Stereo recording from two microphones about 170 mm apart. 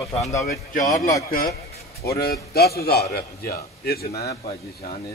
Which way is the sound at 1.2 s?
60° left (ahead or behind).